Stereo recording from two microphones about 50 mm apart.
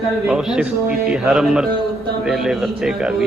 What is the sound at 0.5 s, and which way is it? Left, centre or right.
A man's voice, right.